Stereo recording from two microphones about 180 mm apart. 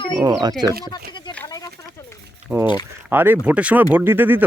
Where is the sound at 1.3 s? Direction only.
15° left (ahead or behind).